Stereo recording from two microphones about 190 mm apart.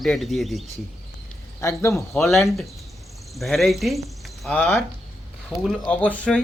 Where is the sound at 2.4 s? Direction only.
Centre (ahead or behind).